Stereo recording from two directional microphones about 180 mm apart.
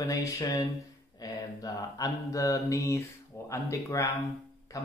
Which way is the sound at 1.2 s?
20° left (ahead or behind).